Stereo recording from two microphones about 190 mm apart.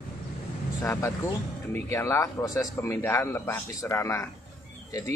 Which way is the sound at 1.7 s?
15° left (ahead or behind).